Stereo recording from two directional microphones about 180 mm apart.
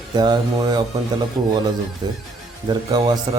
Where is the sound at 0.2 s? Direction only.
25° right (ahead or behind).